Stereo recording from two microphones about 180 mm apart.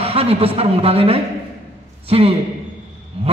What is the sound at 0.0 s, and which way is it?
A man's voice, 35° right (ahead or behind).